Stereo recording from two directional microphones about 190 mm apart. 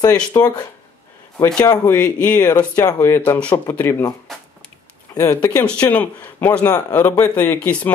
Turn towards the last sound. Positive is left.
turn(degrees=10)  # may be behind; listen again after turning